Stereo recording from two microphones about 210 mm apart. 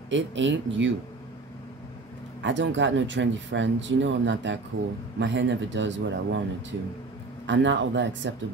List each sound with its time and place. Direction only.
0.1 s speech: 60° right (ahead or behind)
2.4 s speech: 60° right (ahead or behind)
7.4 s speech: 60° right (ahead or behind)